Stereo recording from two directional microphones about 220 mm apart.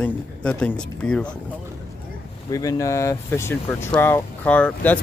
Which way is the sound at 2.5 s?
15° left (ahead or behind).